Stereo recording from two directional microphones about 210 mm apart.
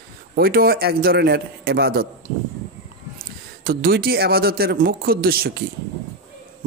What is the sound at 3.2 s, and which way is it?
Speech, 45° right (ahead or behind).